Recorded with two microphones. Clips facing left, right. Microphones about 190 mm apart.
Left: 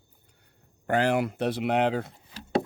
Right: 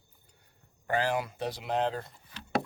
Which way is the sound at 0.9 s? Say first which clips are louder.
Left 5 dB; 65° left (ahead or behind).